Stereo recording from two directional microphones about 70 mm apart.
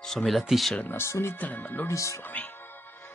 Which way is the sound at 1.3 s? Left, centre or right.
Left.